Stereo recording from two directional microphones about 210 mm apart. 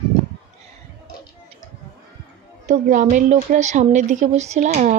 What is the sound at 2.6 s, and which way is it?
Speech, 35° right (ahead or behind).